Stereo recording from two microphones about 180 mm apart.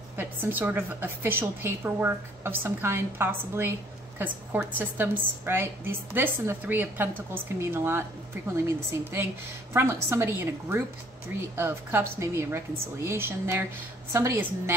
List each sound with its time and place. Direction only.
0.2 s a woman's voice: 10° right (ahead or behind)